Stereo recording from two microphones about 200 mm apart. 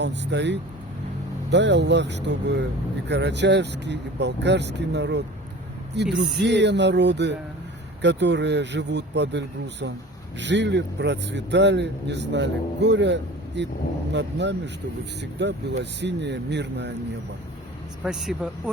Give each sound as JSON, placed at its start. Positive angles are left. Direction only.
{"t": 0.0, "sound": "speech", "side_deg": -60}
{"t": 10.4, "sound": "speech", "side_deg": -60}
{"t": 18.0, "sound": "speech", "side_deg": -5}